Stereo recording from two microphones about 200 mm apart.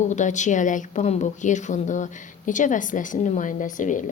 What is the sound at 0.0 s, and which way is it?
Speech, 35° left (ahead or behind).